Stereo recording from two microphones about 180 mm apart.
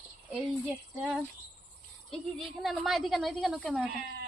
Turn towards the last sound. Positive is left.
turn(degrees=0)  # may be behind; listen again after turning